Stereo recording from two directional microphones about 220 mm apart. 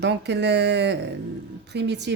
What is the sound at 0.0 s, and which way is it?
Speech, 50° right (ahead or behind).